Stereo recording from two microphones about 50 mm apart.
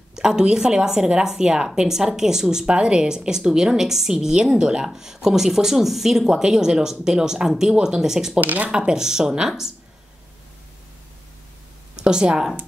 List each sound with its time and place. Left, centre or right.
0.1 s a woman's voice: centre
8.4 s speech: right
8.7 s speech: centre
11.9 s speech: centre